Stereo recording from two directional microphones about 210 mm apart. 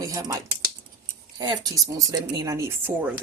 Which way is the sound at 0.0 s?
15° right (ahead or behind).